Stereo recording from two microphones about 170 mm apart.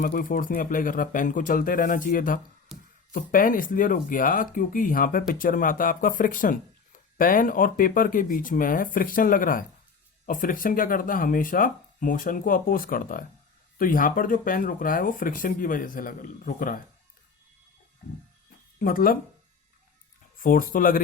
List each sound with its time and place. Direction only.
0.0 s speech: 55° left (ahead or behind)
2.7 s a sound: centre (ahead or behind)
3.1 s speech: 55° left (ahead or behind)
18.8 s speech: 55° left (ahead or behind)
20.4 s speech: 55° left (ahead or behind)